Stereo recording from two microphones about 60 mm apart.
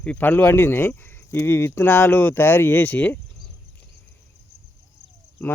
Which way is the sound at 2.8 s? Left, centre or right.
Left.